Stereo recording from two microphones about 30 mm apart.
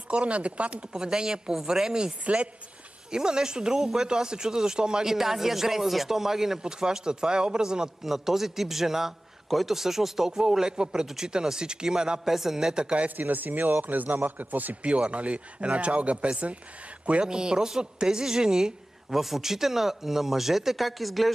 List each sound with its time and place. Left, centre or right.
0.1 s a man's voice: right
0.9 s speech: right
2.2 s a man's voice: right
3.1 s speech: right
5.0 s a man's voice: centre
6.6 s speech: right
8.0 s a man's voice: centre
9.5 s speech: centre
9.8 s a man's voice: centre
10.8 s speech: right
12.3 s a man's voice: centre
13.1 s speech: right
14.8 s a man's voice: right
17.2 s a man's voice: right; by 21.3 s centre